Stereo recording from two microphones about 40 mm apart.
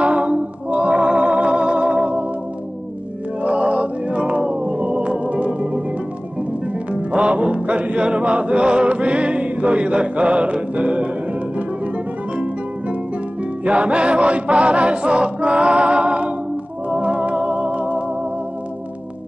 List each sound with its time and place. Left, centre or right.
0.0 s music: right
3.4 s music: right
4.7 s organ: right
6.7 s music: right
13.4 s music: right